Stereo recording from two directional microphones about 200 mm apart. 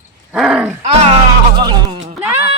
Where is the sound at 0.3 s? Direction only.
5° right (ahead or behind).